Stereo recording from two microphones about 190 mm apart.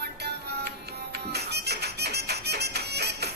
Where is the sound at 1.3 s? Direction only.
60° right (ahead or behind).